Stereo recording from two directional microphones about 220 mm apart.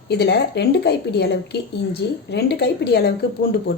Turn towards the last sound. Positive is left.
turn(degrees=45)  # may be behind; listen again after turning